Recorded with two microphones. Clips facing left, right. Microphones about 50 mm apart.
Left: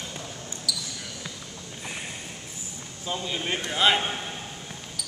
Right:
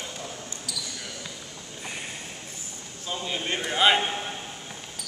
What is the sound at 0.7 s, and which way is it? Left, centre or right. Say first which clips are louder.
Basketball bounce: left 5 dB; right.